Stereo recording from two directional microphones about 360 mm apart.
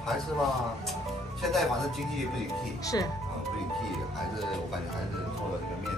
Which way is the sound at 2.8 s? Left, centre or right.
Centre.